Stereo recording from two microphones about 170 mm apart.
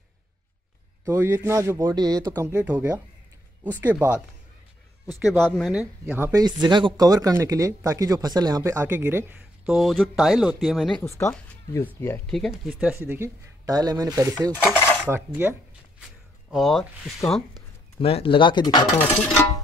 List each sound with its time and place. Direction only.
1.0 s speech: 15° right (ahead or behind)
2.4 s speech: 10° right (ahead or behind)
5.5 s speech: 5° right (ahead or behind)
6.4 s speech: 25° right (ahead or behind)
9.7 s speech: centre (ahead or behind)
11.1 s speech: 15° left (ahead or behind)
12.3 s speech: centre (ahead or behind); by 14.5 s 20° right (ahead or behind)
14.5 s cutlery: 10° left (ahead or behind)
15.0 s speech: 15° right (ahead or behind)
16.4 s speech: centre (ahead or behind)
18.0 s speech: 30° left (ahead or behind)
18.9 s speech: 10° left (ahead or behind)